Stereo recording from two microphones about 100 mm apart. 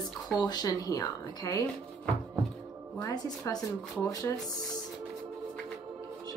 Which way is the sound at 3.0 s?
40° left (ahead or behind).